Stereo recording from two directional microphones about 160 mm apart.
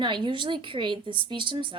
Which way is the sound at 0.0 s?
30° right (ahead or behind).